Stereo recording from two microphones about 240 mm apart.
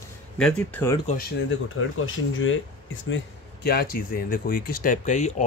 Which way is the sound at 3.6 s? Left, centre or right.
Left.